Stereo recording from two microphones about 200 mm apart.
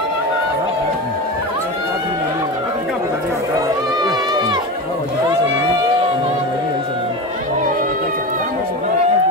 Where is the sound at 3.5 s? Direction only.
20° right (ahead or behind).